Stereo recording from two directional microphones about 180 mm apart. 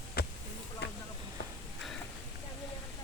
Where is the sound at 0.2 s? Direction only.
60° left (ahead or behind).